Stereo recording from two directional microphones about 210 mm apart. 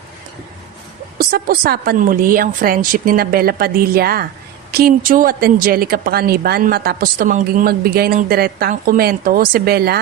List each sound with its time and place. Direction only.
1.2 s a woman's voice: 45° right (ahead or behind)